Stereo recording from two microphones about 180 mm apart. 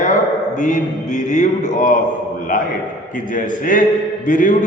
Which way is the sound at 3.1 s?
45° left (ahead or behind).